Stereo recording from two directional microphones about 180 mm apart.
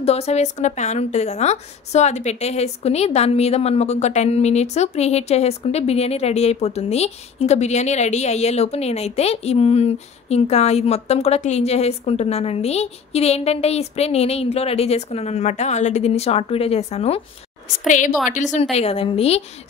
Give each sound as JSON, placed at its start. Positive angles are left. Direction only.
{"t": 0.0, "sound": "a woman's voice", "side_deg": 35}